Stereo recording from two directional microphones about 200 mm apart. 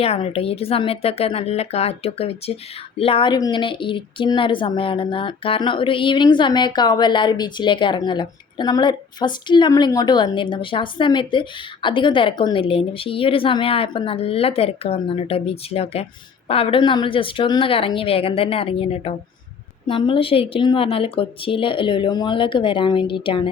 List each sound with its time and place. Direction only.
0.0 s speech: 30° left (ahead or behind)